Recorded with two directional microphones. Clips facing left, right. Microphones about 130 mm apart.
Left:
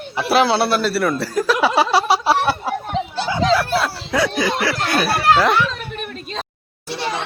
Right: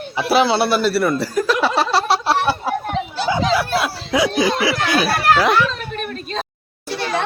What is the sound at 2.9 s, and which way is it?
Chatter, 25° left (ahead or behind).